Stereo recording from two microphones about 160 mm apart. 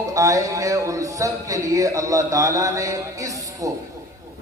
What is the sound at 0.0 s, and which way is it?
Speech, 20° right (ahead or behind).